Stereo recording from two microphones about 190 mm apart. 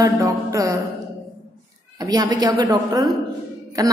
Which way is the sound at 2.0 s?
20° right (ahead or behind).